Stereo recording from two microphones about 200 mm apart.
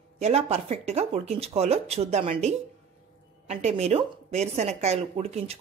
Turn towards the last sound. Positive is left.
turn(degrees=-30)  # may be behind; listen again after turning